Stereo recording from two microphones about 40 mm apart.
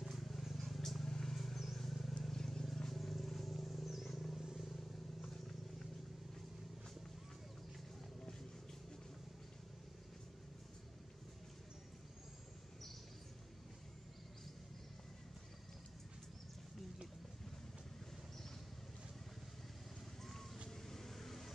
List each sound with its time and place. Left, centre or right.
0.0 s vehicle: centre
1.7 s wild animals: centre
4.4 s vehicle: centre
5.2 s horse: centre
20.2 s a sound: centre
20.6 s vehicle: centre